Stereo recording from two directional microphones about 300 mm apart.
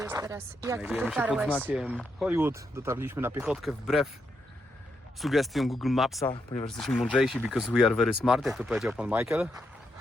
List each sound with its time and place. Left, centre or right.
0.0 s speech: centre
5.2 s speech: centre
6.3 s speech: centre
6.7 s speech: centre